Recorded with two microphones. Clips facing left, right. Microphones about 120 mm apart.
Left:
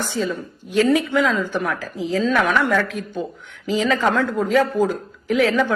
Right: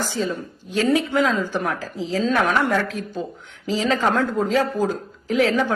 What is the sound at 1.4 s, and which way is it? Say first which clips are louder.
Speech: left 1 dB; 20° right (ahead or behind).